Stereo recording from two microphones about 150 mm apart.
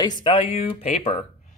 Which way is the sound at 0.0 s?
30° left (ahead or behind).